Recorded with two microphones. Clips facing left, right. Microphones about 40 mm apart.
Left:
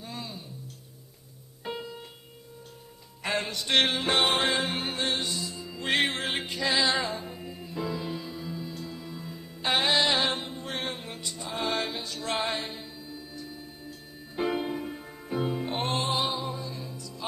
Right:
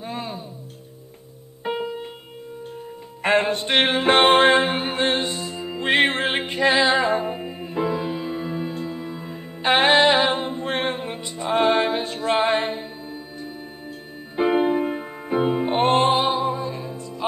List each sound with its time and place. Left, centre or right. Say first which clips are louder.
0.0 s music: right 9 dB; right
1.6 s piano: right 10 dB; right
3.2 s music: right 11 dB; right